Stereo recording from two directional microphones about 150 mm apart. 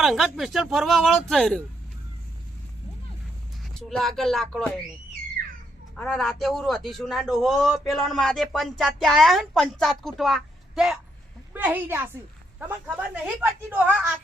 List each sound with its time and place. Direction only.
0.0 s a man's voice: centre (ahead or behind)
3.6 s a man's voice: centre (ahead or behind)
6.0 s a man's voice: 5° left (ahead or behind)